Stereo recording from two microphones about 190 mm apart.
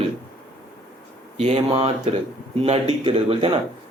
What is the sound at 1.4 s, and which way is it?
A man's voice, 35° right (ahead or behind).